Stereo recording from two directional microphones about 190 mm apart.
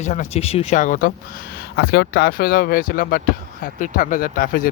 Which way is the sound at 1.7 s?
60° left (ahead or behind).